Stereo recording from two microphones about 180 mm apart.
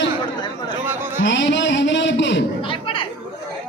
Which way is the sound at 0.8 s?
10° right (ahead or behind).